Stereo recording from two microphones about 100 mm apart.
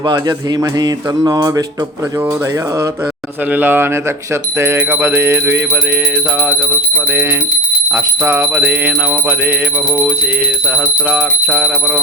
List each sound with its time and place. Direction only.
0.0 s speech: 45° right (ahead or behind)
3.5 s jingle bell: 20° right (ahead or behind)
7.1 s jingle bell: 20° right (ahead or behind)
10.7 s jingle bell: 15° right (ahead or behind)